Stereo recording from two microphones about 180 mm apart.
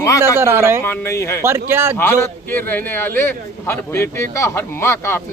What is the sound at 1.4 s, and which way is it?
Speech, 15° right (ahead or behind).